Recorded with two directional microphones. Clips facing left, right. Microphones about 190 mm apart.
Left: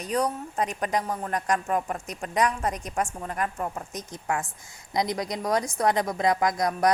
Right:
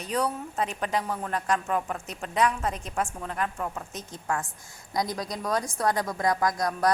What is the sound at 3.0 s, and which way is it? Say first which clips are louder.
A woman's voice: left 1 dB; 10° left (ahead or behind).